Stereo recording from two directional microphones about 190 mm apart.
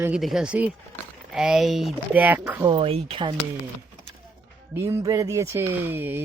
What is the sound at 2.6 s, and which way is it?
Speech, 30° right (ahead or behind).